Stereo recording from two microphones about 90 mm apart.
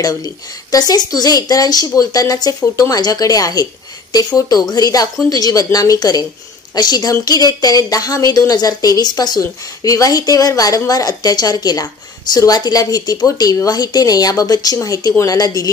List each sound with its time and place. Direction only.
0.0 s speech: 45° left (ahead or behind)
2.6 s speech: 35° left (ahead or behind)